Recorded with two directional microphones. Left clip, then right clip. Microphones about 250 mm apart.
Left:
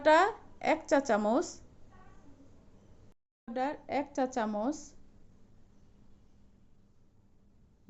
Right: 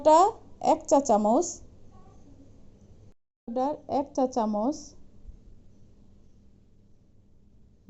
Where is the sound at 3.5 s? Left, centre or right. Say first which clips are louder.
Right 6 dB; centre.